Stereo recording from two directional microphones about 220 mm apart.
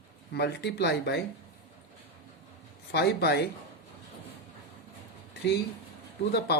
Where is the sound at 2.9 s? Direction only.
50° left (ahead or behind).